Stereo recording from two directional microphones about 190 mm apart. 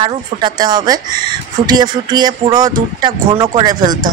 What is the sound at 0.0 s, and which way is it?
Speech, 25° right (ahead or behind).